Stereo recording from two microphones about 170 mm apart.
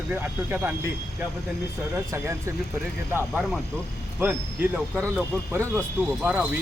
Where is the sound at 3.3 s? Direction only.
Centre (ahead or behind).